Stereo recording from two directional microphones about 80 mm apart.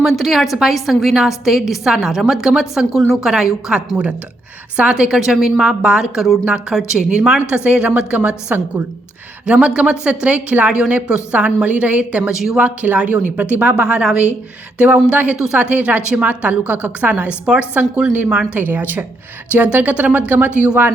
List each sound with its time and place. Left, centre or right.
0.0 s a woman's voice: centre
12.3 s a woman's voice: centre
12.5 s a woman's voice: centre